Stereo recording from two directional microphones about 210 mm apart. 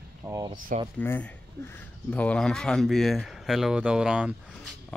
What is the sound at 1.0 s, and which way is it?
Speech, 10° left (ahead or behind).